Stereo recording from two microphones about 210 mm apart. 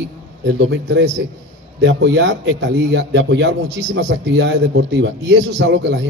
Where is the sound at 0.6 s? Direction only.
60° right (ahead or behind).